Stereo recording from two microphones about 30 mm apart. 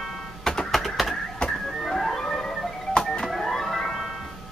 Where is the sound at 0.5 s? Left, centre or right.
Centre.